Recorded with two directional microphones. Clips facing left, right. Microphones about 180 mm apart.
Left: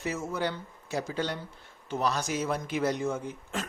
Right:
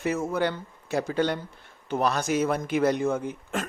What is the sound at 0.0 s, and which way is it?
Speech, 60° right (ahead or behind).